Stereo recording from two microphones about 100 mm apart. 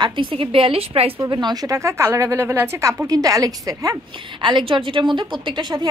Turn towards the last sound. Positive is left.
turn(degrees=-45)  # may be behind; listen again after turning